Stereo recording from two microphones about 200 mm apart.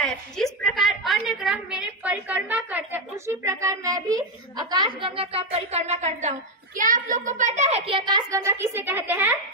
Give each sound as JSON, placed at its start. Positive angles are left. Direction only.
{"t": 0.0, "sound": "a woman's voice", "side_deg": 0}